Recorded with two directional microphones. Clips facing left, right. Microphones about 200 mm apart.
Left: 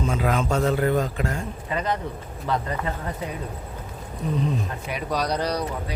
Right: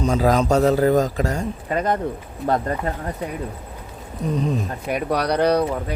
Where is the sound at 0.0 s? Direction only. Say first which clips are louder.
Right 6 dB; 40° right (ahead or behind).